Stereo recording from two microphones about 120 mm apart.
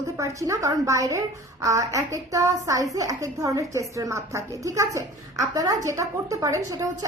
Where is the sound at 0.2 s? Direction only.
25° right (ahead or behind).